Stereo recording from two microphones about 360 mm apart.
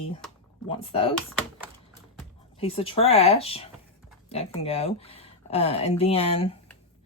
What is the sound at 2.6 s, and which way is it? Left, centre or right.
Speech, centre.